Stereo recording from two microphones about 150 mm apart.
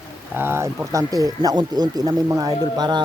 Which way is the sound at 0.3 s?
15° right (ahead or behind).